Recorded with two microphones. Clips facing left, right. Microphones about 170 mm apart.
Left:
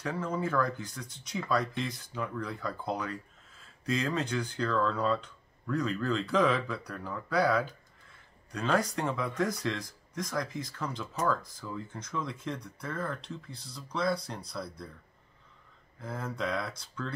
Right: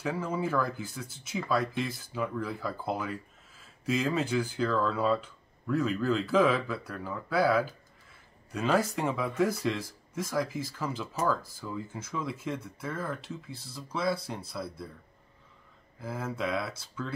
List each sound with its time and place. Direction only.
0.0 s speech: 5° right (ahead or behind)
16.0 s speech: 5° right (ahead or behind)